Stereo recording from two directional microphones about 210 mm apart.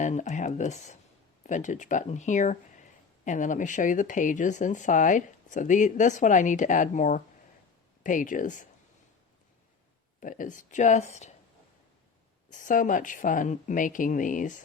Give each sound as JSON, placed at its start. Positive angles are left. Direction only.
{"t": 0.0, "sound": "speech", "side_deg": 35}
{"t": 10.2, "sound": "speech", "side_deg": 40}
{"t": 12.5, "sound": "speech", "side_deg": 40}